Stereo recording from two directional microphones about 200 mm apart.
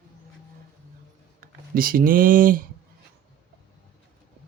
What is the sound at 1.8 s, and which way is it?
Speech, 45° right (ahead or behind).